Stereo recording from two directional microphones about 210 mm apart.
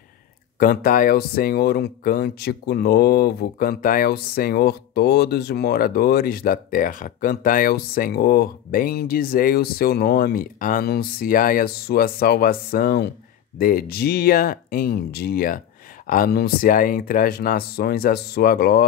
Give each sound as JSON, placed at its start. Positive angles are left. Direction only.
{"t": 0.6, "sound": "speech", "side_deg": 40}